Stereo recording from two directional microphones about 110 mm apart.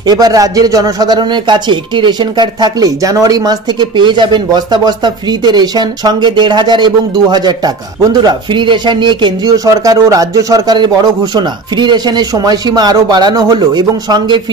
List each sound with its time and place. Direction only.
0.0 s speech: 35° right (ahead or behind)